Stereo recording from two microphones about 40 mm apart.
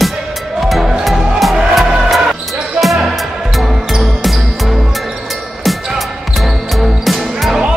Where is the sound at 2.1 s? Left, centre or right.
Centre.